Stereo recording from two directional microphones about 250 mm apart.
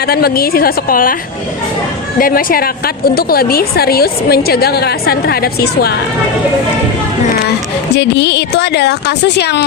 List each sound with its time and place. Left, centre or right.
0.0 s a woman's voice: left
2.1 s a woman's voice: left
7.9 s speech: left